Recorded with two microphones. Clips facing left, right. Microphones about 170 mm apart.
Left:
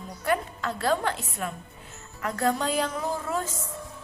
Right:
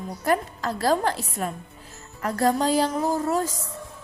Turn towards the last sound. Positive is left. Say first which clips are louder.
# right 6 dB
turn(degrees=-40)  # may be behind; listen again after turning